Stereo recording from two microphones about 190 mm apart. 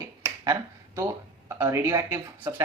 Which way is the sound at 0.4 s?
20° right (ahead or behind).